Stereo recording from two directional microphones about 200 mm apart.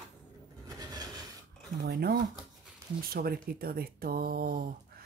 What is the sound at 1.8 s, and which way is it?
Speech, 55° right (ahead or behind).